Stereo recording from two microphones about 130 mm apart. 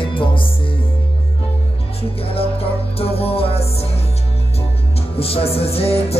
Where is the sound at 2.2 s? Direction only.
45° left (ahead or behind).